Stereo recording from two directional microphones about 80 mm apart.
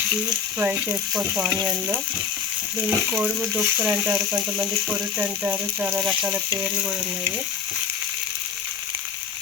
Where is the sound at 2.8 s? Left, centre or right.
Centre.